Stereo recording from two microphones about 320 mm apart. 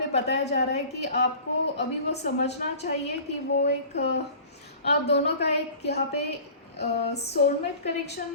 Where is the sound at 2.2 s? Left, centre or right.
Left.